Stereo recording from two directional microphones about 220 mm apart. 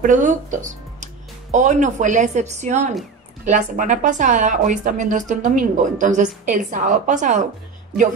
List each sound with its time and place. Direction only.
0.0 s a woman's voice: 35° right (ahead or behind)